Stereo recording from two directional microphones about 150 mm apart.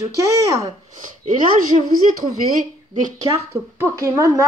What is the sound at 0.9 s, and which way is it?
Speech, 55° right (ahead or behind).